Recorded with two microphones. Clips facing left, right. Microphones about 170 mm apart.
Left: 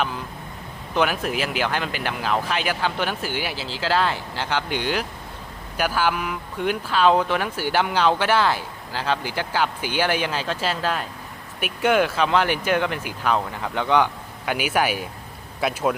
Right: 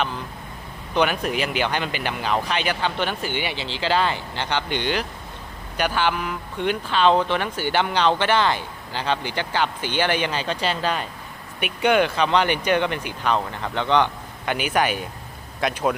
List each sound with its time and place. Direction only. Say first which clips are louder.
0.9 s speech: right 1 dB; centre (ahead or behind)